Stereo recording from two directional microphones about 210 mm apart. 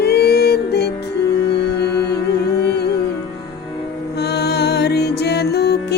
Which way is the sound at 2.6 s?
50° left (ahead or behind).